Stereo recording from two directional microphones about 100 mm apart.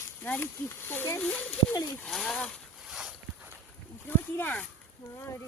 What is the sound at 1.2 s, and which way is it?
Speech, 15° left (ahead or behind).